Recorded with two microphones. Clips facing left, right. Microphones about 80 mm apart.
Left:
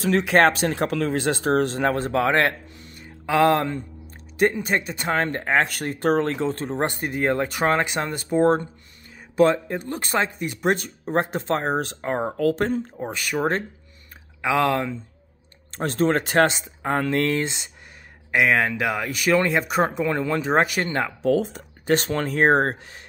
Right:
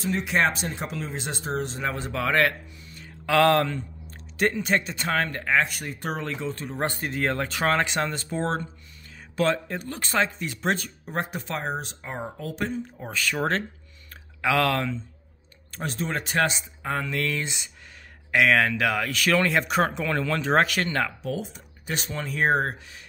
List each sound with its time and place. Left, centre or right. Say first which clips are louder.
0.0 s speech: left 6 dB; left
3.0 s a sound: left 1 dB; centre
4.7 s speech: left 1 dB; centre
5.0 s speech: left 3 dB; left
6.8 s speech: left 2 dB; left
11.1 s speech: left 8 dB; left
11.8 s speech: left 9 dB; left
12.9 s speech: left 3 dB; left
15.8 s speech: left 8 dB; left
18.3 s speech: left 1 dB; centre
20.1 s speech: left 2 dB; centre
21.3 s speech: left 10 dB; left